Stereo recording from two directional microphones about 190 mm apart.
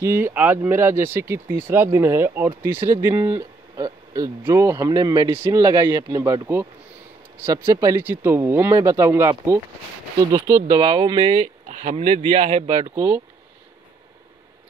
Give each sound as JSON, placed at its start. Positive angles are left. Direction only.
{"t": 0.0, "sound": "speech", "side_deg": -10}
{"t": 10.8, "sound": "speech", "side_deg": -25}
{"t": 12.9, "sound": "speech", "side_deg": -10}